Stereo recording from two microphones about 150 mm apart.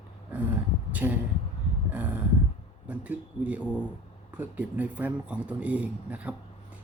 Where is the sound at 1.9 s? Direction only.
10° right (ahead or behind).